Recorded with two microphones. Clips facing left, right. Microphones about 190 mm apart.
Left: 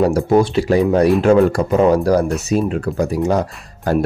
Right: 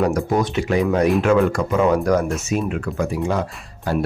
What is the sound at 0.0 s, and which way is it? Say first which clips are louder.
Speech: left 5 dB; 30° left (ahead or behind).